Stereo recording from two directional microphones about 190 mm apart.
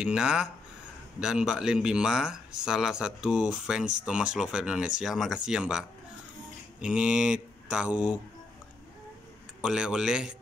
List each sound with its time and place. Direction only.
0.0 s speech: 5° right (ahead or behind)
9.6 s speech: 5° right (ahead or behind)